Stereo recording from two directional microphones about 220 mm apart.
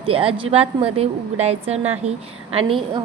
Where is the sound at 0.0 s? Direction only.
25° right (ahead or behind).